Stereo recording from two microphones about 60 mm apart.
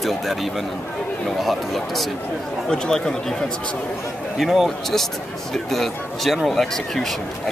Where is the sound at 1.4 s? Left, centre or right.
Centre.